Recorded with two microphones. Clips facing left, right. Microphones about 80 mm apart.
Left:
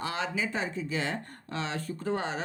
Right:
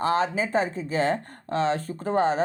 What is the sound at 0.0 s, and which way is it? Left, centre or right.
Speech, right.